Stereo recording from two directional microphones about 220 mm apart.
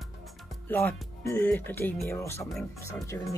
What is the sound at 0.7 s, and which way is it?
Speech, 10° left (ahead or behind).